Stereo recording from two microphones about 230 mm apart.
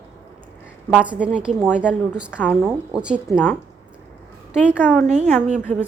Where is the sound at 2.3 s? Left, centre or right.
Centre.